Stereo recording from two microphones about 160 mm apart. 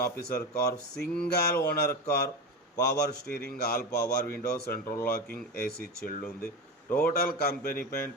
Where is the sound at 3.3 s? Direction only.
70° left (ahead or behind).